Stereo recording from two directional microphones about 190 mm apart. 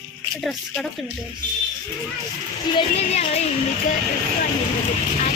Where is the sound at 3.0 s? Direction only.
35° left (ahead or behind).